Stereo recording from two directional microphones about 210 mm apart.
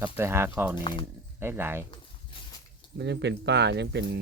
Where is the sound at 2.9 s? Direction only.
55° right (ahead or behind).